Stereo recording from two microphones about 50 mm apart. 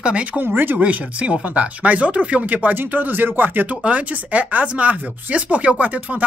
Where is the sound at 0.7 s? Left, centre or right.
Right.